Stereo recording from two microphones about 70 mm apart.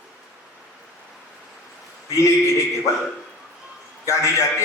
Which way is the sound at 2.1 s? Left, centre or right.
Left.